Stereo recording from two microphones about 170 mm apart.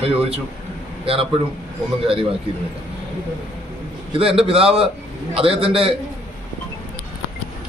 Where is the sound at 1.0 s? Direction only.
35° right (ahead or behind).